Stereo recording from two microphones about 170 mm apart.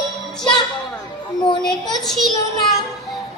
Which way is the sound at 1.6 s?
5° left (ahead or behind).